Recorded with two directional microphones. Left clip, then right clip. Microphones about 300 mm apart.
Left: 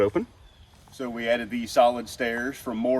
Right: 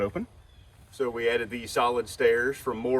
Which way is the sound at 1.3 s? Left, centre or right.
Centre.